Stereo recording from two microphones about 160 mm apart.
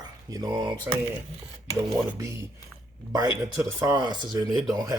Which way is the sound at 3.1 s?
25° right (ahead or behind).